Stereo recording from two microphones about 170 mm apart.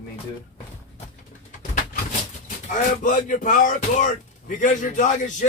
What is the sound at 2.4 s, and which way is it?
A man's voice, 50° left (ahead or behind).